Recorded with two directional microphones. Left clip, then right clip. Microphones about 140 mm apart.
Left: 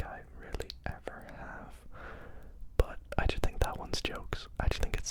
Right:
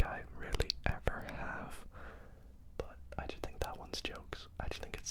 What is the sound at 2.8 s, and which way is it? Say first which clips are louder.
Whispering: left 10 dB; 45° left (ahead or behind).